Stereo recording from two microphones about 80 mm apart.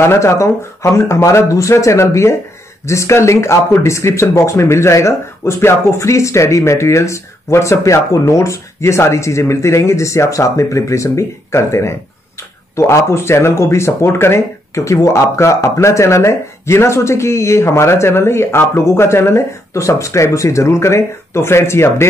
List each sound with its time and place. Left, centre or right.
0.0 s speech: left